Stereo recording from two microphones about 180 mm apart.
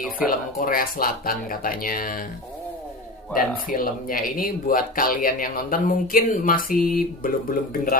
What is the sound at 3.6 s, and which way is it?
Speech, 50° left (ahead or behind).